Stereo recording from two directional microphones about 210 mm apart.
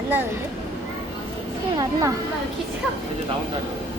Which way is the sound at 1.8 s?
15° right (ahead or behind).